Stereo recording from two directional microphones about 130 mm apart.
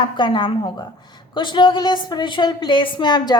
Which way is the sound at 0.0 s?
35° left (ahead or behind).